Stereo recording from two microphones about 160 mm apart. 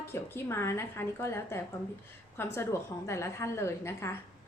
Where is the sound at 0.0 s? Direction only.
15° left (ahead or behind).